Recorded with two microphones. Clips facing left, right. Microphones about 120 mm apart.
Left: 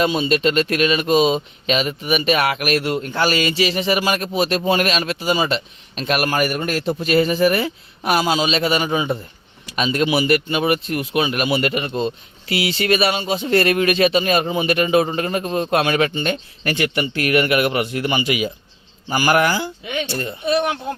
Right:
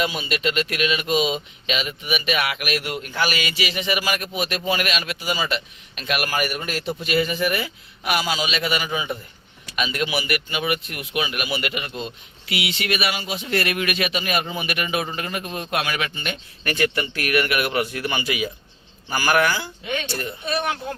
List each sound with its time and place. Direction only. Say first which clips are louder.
0.0 s speech: left 7 dB; 35° left (ahead or behind)
16.7 s speech: left 2 dB; 25° left (ahead or behind)
20.1 s speech: left 3 dB; 35° left (ahead or behind)
20.4 s speech: left 7 dB; 15° left (ahead or behind)